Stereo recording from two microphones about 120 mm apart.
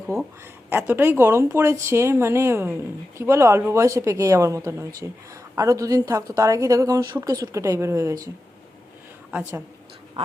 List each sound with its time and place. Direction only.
0.8 s speech: 15° right (ahead or behind)
9.3 s a woman's voice: 20° right (ahead or behind)
10.2 s speech: 50° right (ahead or behind)